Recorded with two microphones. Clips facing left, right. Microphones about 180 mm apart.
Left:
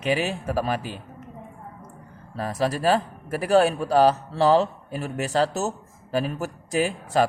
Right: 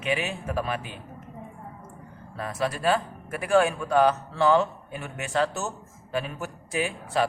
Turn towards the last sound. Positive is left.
turn(degrees=40)  # may be behind; listen again after turning